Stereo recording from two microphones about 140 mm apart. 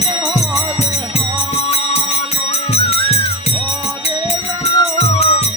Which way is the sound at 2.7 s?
45° left (ahead or behind).